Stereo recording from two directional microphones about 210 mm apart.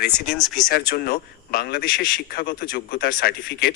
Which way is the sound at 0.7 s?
45° left (ahead or behind).